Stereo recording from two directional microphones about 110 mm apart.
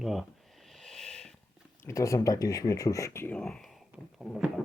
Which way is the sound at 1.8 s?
25° left (ahead or behind).